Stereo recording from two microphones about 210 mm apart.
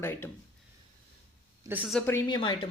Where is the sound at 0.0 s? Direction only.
10° left (ahead or behind).